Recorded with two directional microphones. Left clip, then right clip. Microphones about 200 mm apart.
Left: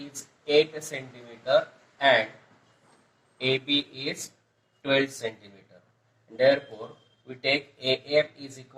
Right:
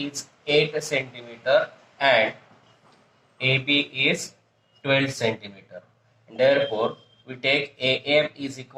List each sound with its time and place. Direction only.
0.0 s speech: 15° right (ahead or behind)